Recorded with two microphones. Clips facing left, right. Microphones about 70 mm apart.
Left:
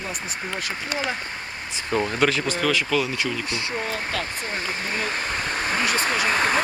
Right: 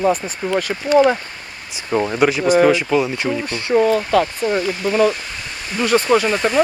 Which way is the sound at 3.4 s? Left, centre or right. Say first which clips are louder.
Right 12 dB; right.